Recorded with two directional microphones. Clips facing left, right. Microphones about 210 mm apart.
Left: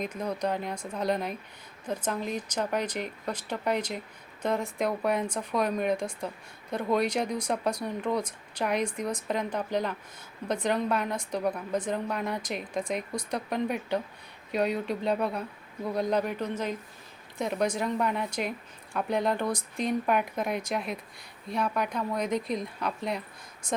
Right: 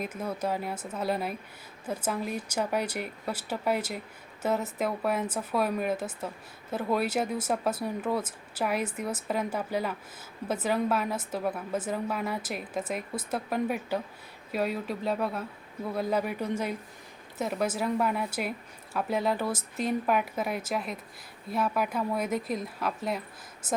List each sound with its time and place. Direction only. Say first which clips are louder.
0.0 s a woman's voice: left 1 dB; 5° right (ahead or behind)